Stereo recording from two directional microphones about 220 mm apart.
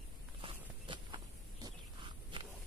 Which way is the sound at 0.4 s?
20° right (ahead or behind).